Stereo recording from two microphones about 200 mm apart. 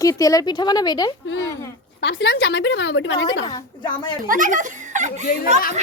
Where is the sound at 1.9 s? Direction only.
60° left (ahead or behind).